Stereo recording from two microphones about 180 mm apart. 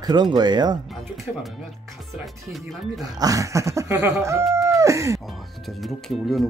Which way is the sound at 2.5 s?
Centre (ahead or behind).